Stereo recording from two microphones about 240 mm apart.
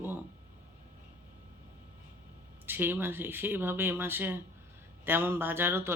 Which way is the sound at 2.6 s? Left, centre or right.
Centre.